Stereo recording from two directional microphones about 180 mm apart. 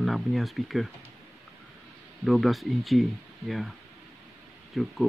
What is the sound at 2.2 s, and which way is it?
Speech, centre (ahead or behind).